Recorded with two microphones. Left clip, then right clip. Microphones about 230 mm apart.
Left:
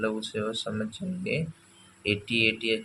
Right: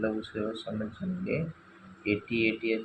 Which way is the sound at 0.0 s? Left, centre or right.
Left.